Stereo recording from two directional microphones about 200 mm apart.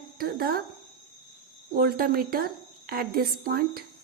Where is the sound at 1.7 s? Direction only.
50° right (ahead or behind).